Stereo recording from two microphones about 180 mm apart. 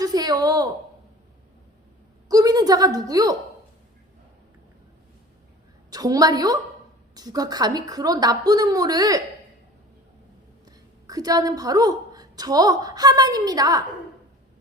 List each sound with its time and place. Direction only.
0.0 s a sound: 20° right (ahead or behind)
2.3 s a woman's voice: 20° right (ahead or behind)
5.9 s a woman's voice: 20° right (ahead or behind)
10.7 s a woman's voice: 20° right (ahead or behind)